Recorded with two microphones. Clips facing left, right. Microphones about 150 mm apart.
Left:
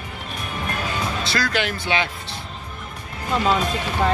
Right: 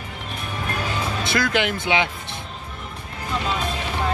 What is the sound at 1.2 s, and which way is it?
Speech, 20° right (ahead or behind).